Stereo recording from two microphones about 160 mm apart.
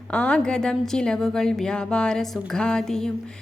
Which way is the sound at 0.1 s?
5° left (ahead or behind).